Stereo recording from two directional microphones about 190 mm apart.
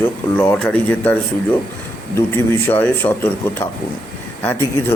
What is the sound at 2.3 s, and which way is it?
Speech, 10° left (ahead or behind).